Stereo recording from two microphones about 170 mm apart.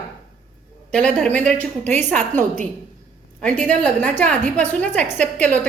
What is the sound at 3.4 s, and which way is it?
A woman's voice, 5° left (ahead or behind).